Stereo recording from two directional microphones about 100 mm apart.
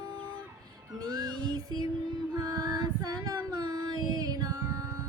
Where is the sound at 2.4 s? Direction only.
40° right (ahead or behind).